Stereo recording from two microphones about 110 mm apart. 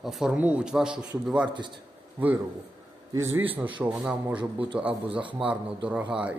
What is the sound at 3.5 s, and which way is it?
Speech, 50° right (ahead or behind).